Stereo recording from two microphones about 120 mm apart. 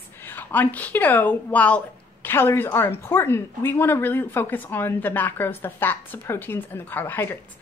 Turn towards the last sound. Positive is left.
turn(degrees=20)  # may be behind; listen again after turning